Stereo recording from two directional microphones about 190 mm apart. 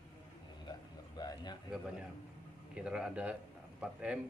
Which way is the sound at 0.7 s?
20° left (ahead or behind).